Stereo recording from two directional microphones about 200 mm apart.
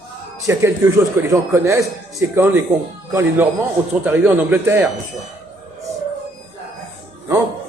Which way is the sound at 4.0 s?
10° right (ahead or behind).